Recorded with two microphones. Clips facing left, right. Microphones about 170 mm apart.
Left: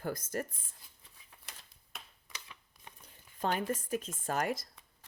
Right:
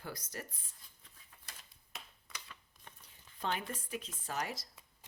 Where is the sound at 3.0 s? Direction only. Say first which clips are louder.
Left 5 dB; 45° left (ahead or behind).